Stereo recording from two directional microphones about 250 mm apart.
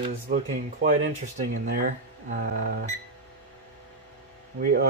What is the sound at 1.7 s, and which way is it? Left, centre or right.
Speech, right.